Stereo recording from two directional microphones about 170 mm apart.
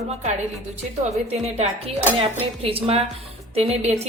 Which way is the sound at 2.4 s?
35° right (ahead or behind).